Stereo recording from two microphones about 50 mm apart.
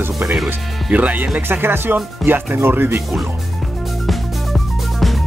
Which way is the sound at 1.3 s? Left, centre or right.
Right.